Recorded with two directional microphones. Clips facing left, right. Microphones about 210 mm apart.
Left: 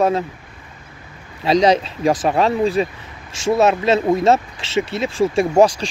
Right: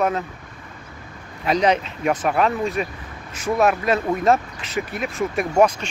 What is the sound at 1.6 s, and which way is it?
Speech, 30° left (ahead or behind).